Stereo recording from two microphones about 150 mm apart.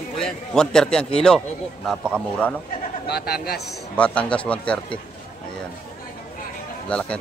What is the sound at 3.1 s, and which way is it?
Speech, 90° left.